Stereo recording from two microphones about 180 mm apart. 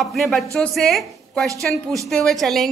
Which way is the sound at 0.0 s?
Centre (ahead or behind).